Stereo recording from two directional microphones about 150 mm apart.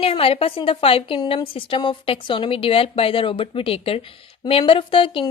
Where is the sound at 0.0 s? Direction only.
40° left (ahead or behind).